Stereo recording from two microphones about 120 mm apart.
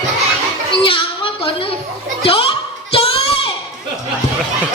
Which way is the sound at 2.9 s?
50° left (ahead or behind).